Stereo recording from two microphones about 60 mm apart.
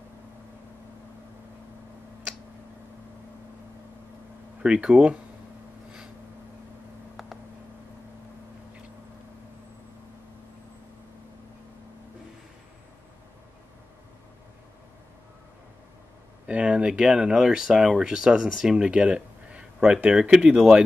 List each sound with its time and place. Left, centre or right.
4.6 s speech: centre
16.4 s speech: centre